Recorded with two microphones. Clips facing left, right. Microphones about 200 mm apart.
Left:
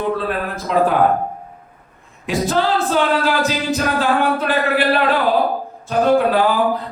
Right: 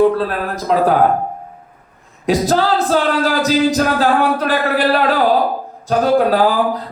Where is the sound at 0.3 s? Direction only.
40° right (ahead or behind).